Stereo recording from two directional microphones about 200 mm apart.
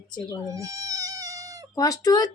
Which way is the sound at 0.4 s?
15° right (ahead or behind).